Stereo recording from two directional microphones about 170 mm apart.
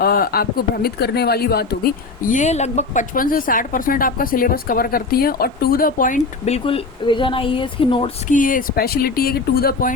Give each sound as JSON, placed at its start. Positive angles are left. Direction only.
{"t": 0.0, "sound": "speech", "side_deg": 60}
{"t": 2.3, "sound": "a woman's voice", "side_deg": 45}
{"t": 8.3, "sound": "speech", "side_deg": 50}